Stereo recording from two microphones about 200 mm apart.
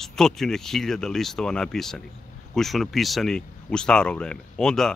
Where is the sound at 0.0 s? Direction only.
Centre (ahead or behind).